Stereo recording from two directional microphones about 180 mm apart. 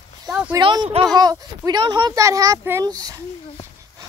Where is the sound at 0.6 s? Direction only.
25° right (ahead or behind).